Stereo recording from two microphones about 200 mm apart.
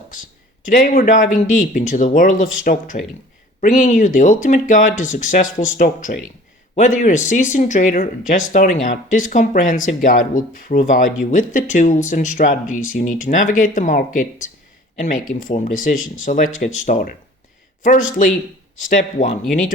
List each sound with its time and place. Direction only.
0.1 s speech: 40° left (ahead or behind)
18.2 s speech: 40° left (ahead or behind)